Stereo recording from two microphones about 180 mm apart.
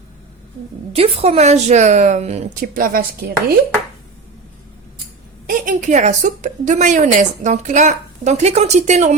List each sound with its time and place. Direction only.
0.9 s speech: 35° right (ahead or behind)
2.7 s speech: 55° right (ahead or behind)
5.5 s a woman's voice: 50° right (ahead or behind)